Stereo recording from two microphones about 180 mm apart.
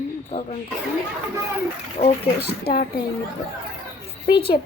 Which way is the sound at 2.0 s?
40° left (ahead or behind).